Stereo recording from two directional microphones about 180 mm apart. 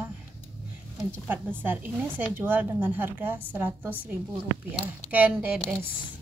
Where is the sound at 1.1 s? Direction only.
10° right (ahead or behind).